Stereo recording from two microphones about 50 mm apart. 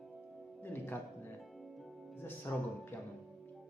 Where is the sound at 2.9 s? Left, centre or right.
Left.